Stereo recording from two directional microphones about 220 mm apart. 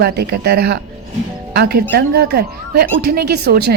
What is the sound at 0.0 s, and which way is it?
Speech, 45° right (ahead or behind).